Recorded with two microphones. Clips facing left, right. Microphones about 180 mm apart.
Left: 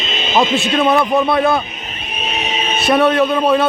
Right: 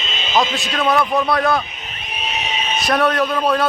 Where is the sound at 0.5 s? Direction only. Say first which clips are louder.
Left 4 dB; 25° left (ahead or behind).